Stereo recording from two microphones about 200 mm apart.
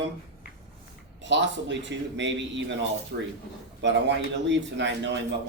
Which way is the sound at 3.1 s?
50° right (ahead or behind).